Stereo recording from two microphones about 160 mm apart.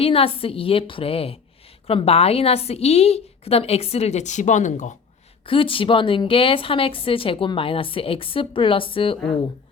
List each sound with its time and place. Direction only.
0.0 s a woman's voice: 35° left (ahead or behind)
5.5 s a woman's voice: 35° left (ahead or behind)